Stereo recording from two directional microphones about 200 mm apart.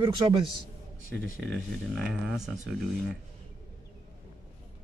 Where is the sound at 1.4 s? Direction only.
Centre (ahead or behind).